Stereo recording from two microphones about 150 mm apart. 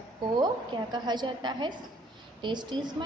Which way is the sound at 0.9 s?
30° right (ahead or behind).